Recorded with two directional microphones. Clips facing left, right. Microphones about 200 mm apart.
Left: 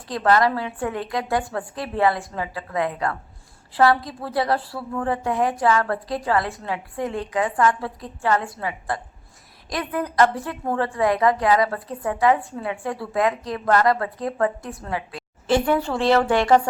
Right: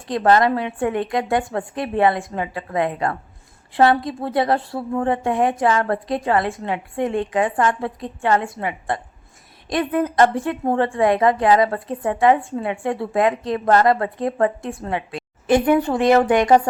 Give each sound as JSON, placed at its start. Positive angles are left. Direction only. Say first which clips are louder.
{"t": 0.1, "sound": "a woman's voice", "louder": "right 3 dB", "side_deg": -20}